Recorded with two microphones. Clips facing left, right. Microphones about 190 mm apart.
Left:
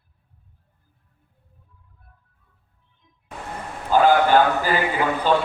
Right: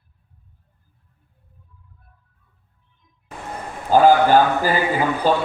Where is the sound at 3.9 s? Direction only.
40° right (ahead or behind).